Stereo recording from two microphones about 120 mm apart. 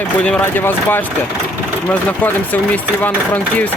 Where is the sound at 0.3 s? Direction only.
15° left (ahead or behind).